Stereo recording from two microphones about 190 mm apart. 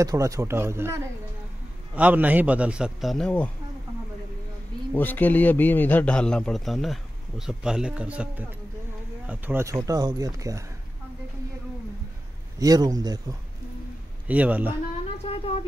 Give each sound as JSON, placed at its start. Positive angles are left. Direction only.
{"t": 0.0, "sound": "a man's voice", "side_deg": -15}
{"t": 4.9, "sound": "a man's voice", "side_deg": 10}
{"t": 12.5, "sound": "speech", "side_deg": -20}
{"t": 14.2, "sound": "a man's voice", "side_deg": -10}
{"t": 15.2, "sound": "a sound", "side_deg": 30}